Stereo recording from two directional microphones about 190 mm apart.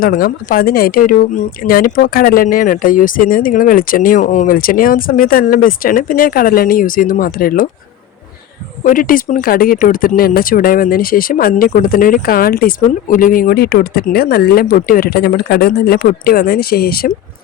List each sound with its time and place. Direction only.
0.0 s speech: 50° left (ahead or behind)
8.8 s speech: 45° left (ahead or behind)